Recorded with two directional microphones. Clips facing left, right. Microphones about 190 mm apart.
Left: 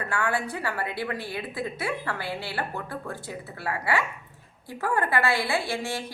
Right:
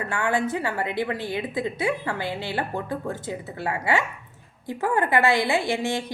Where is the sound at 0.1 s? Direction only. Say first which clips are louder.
Right 4 dB; 20° right (ahead or behind).